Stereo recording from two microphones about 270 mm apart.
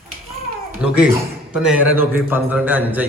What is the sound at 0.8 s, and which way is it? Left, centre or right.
A man's voice, centre.